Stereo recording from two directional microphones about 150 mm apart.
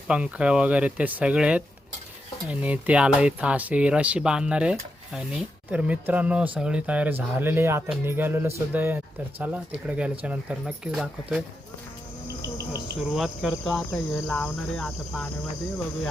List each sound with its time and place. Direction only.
0.1 s speech: 5° right (ahead or behind)
13.0 s cricket: centre (ahead or behind)